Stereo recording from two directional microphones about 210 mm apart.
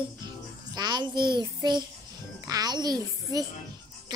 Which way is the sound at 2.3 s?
15° right (ahead or behind).